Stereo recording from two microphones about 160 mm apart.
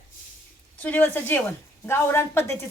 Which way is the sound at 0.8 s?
10° left (ahead or behind).